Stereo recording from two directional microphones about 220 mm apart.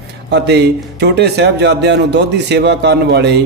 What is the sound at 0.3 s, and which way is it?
A man's voice, 50° right (ahead or behind).